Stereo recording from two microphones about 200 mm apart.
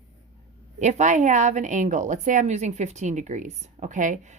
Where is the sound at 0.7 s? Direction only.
35° right (ahead or behind).